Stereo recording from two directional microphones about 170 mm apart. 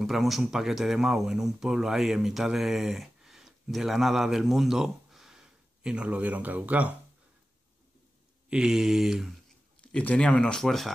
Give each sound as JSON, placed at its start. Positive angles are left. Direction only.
{"t": 0.0, "sound": "speech", "side_deg": 0}
{"t": 8.5, "sound": "speech", "side_deg": -5}